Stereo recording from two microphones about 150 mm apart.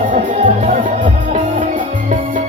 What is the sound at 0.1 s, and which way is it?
Music, 55° right (ahead or behind).